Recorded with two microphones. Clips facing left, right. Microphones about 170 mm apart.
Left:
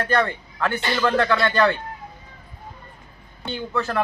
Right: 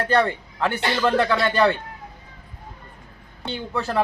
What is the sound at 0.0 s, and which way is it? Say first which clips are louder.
Speech: right 2 dB; 30° right (ahead or behind).